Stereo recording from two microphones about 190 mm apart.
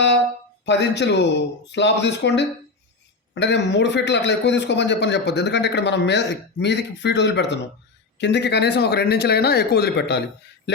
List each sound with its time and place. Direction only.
0.6 s a man's voice: 65° left (ahead or behind)